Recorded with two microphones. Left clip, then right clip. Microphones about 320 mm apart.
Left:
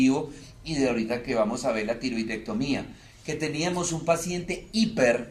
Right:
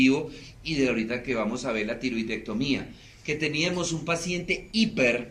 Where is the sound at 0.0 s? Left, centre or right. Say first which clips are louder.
Right 1 dB; left.